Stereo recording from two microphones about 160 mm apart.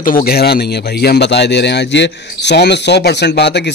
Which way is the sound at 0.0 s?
65° left (ahead or behind).